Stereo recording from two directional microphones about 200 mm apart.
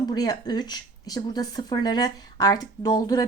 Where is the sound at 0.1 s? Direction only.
20° left (ahead or behind).